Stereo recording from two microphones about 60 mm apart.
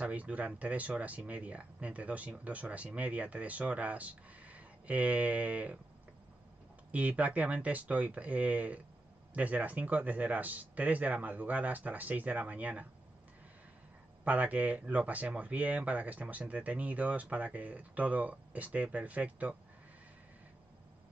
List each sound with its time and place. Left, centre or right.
0.0 s speech: right
6.9 s speech: right
14.2 s speech: right